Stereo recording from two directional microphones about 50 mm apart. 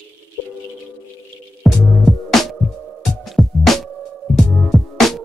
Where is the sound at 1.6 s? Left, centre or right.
Centre.